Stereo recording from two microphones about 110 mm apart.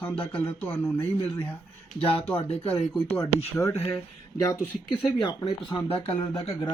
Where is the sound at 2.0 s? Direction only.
60° left (ahead or behind).